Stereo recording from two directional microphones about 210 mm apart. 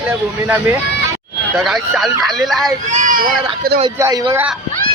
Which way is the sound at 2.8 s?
35° right (ahead or behind).